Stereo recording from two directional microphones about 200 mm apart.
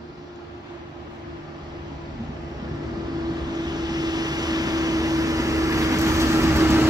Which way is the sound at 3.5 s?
20° right (ahead or behind).